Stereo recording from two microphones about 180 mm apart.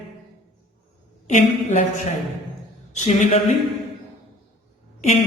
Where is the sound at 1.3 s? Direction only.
45° left (ahead or behind).